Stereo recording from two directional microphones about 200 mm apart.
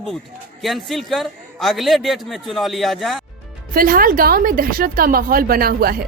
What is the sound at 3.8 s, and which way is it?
Speech, 45° right (ahead or behind).